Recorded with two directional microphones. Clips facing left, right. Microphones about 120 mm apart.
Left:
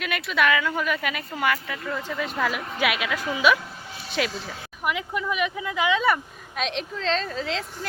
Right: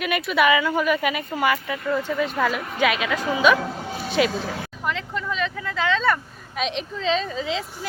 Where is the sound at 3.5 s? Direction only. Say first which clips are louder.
Right 11 dB; 80° right.